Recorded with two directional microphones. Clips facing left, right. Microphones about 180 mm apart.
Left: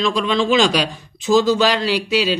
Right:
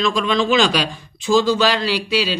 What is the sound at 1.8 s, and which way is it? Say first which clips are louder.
Speech: left 2 dB; 35° right (ahead or behind).